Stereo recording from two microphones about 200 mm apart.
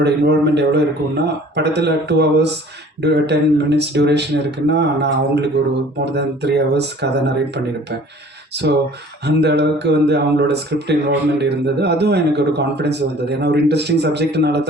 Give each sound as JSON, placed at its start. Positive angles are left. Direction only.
{"t": 0.0, "sound": "speech", "side_deg": -60}